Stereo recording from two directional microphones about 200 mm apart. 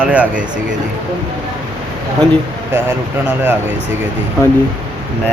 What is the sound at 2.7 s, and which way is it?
Speech, 10° right (ahead or behind).